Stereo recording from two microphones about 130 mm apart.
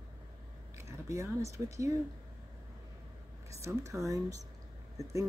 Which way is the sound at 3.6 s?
25° right (ahead or behind).